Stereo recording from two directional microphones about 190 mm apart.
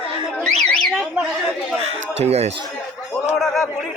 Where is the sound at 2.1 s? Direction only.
35° right (ahead or behind).